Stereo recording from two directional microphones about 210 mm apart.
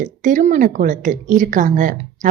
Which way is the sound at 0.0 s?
35° right (ahead or behind).